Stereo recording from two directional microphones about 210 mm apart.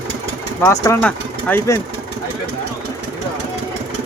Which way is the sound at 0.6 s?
15° left (ahead or behind).